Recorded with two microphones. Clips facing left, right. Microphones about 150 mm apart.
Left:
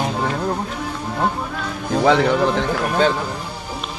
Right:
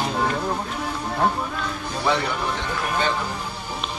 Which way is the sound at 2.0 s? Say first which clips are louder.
Left 8 dB; 90° left.